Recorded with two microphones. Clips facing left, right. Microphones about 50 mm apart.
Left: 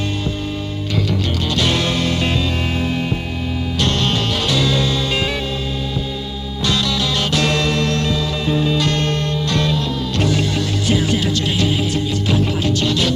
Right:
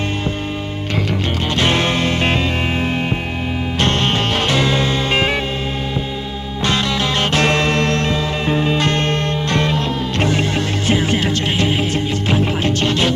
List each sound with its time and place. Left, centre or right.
1.5 s music: right
3.8 s music: right
6.6 s music: right